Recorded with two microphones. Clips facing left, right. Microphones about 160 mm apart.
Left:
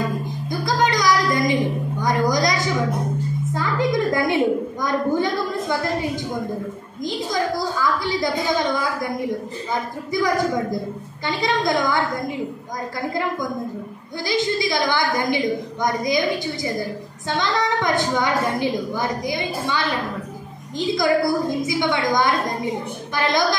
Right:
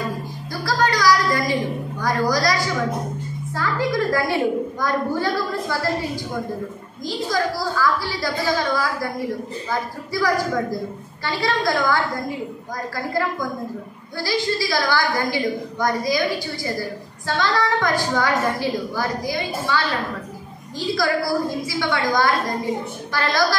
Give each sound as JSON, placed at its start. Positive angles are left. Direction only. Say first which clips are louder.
{"t": 0.5, "sound": "music", "louder": "left 1 dB", "side_deg": 20}
{"t": 3.5, "sound": "a woman's voice", "louder": "even", "side_deg": 20}
{"t": 7.1, "sound": "a woman's voice", "louder": "even", "side_deg": 20}
{"t": 14.2, "sound": "a woman's voice", "louder": "left 1 dB", "side_deg": 20}